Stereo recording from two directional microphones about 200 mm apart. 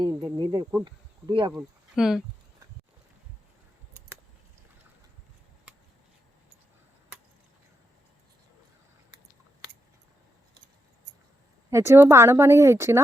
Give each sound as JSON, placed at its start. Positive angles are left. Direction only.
{"t": 0.0, "sound": "insect", "side_deg": -20}
{"t": 0.9, "sound": "speech", "side_deg": -25}
{"t": 1.5, "sound": "speech", "side_deg": 0}
{"t": 11.7, "sound": "a woman's voice", "side_deg": -15}